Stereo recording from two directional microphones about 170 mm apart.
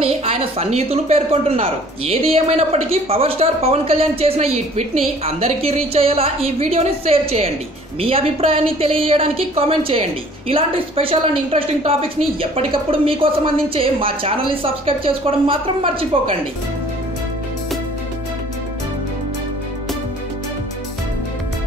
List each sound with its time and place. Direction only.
0.0 s a woman's voice: 35° right (ahead or behind)